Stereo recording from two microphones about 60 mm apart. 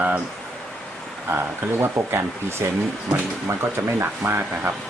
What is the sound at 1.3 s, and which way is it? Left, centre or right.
Speech, right.